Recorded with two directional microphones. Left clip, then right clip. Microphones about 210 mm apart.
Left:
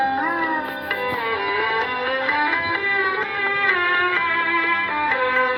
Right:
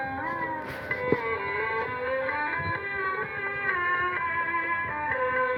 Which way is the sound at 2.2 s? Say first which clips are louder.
Left 9 dB; 45° left (ahead or behind).